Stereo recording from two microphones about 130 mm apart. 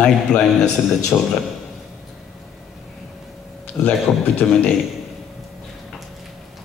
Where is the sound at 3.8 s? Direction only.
15° left (ahead or behind).